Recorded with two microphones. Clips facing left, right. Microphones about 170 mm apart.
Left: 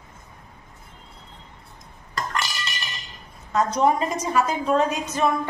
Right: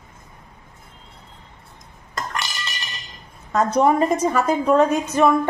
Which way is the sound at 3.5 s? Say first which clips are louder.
Right 3 dB; 55° right (ahead or behind).